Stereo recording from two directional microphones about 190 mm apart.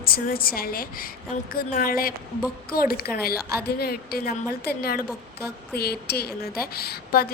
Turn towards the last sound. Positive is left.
turn(degrees=55)  # may be behind; listen again after turning